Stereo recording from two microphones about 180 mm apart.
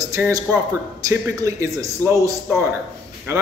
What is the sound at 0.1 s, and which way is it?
A man's voice, 15° right (ahead or behind).